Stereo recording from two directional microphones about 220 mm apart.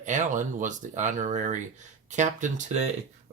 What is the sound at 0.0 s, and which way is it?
Speech, 35° right (ahead or behind).